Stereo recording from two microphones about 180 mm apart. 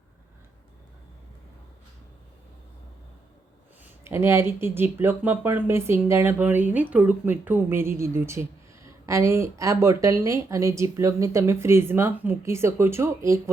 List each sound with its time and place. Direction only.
4.0 s speech: 15° right (ahead or behind)